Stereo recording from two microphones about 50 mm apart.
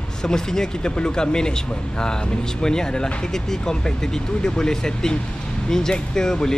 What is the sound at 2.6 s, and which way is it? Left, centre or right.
Speech, centre.